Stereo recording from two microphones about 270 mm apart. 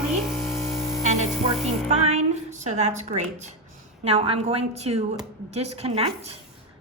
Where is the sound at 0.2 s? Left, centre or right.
Centre.